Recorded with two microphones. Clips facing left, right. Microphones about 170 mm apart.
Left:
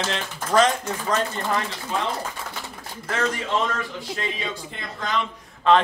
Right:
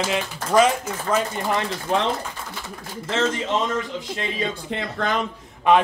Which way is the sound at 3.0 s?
25° right (ahead or behind).